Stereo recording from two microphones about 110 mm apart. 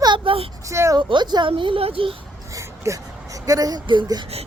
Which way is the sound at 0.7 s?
25° right (ahead or behind).